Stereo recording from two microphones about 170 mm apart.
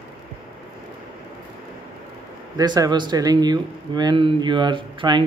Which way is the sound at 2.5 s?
25° right (ahead or behind).